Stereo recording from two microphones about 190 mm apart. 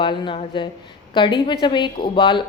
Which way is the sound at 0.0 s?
25° left (ahead or behind).